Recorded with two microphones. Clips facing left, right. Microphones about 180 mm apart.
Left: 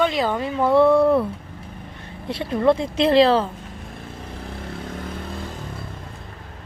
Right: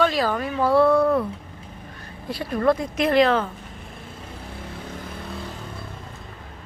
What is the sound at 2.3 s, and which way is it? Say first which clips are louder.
Speech: left 2 dB; 25° left (ahead or behind).